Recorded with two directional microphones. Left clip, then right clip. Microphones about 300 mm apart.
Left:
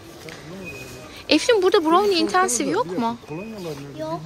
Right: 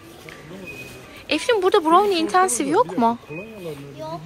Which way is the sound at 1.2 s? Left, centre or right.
Centre.